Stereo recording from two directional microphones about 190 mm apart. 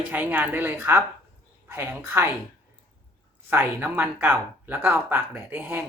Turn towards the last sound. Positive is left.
turn(degrees=-10)  # may be behind; listen again after turning